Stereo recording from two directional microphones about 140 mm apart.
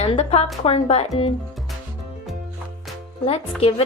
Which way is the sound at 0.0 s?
45° left (ahead or behind).